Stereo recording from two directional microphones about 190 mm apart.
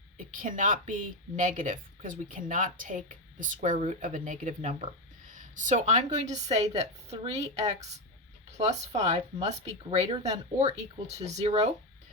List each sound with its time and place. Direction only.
0.3 s a woman's voice: 45° right (ahead or behind)